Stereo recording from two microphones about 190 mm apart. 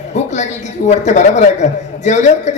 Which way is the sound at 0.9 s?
40° left (ahead or behind).